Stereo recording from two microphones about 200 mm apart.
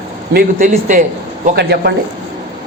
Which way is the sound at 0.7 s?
40° right (ahead or behind).